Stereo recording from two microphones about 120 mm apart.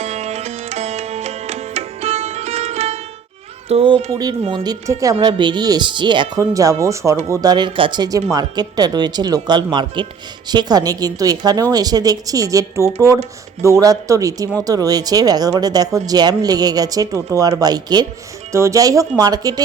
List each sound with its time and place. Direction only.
0.0 s music: 65° right (ahead or behind)
3.7 s speech: 50° right (ahead or behind)
4.4 s speech: 40° right (ahead or behind)
5.2 s speech: 40° right (ahead or behind)
6.4 s speech: 25° right (ahead or behind)
7.3 s speech: 35° right (ahead or behind)